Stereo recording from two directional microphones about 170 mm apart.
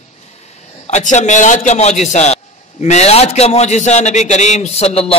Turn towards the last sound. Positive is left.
turn(degrees=35)  # may be behind; listen again after turning